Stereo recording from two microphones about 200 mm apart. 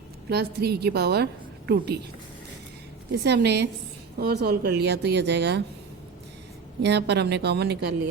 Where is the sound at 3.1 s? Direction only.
55° right (ahead or behind).